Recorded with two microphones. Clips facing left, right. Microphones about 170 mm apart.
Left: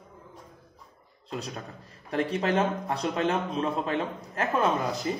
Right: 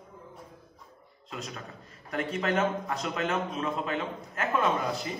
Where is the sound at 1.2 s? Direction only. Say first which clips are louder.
Left 4 dB; 35° left (ahead or behind).